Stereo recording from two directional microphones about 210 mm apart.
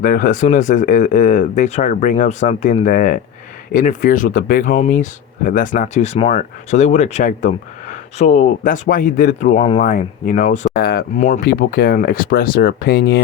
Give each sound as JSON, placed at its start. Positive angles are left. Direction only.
{"t": 0.0, "sound": "speech", "side_deg": 40}
{"t": 9.6, "sound": "speech", "side_deg": 25}
{"t": 9.8, "sound": "speech", "side_deg": 40}
{"t": 10.8, "sound": "speech", "side_deg": 50}